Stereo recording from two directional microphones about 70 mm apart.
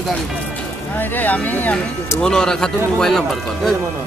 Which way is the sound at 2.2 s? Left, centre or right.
Centre.